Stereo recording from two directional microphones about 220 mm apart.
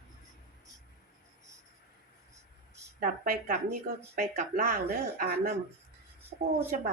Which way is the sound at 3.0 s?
40° right (ahead or behind).